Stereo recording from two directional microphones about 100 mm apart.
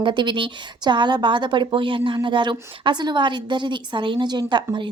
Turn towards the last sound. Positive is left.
turn(degrees=-50)  # may be behind; listen again after turning